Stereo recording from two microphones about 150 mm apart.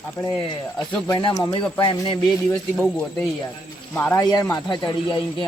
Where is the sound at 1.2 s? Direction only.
35° left (ahead or behind).